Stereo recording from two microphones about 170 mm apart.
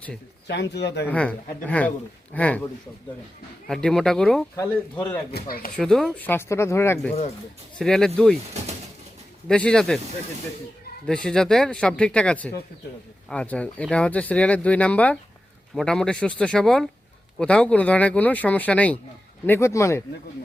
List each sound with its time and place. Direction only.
0.4 s speech: 85° left
1.0 s speech: 10° left (ahead or behind)
3.7 s speech: 5° left (ahead or behind)
4.5 s speech: 15° left (ahead or behind)
5.3 s speech: 60° left (ahead or behind)
5.7 s speech: 5° left (ahead or behind)
7.8 s speech: 5° left (ahead or behind)
9.5 s speech: 5° left (ahead or behind)
11.0 s speech: 5° left (ahead or behind)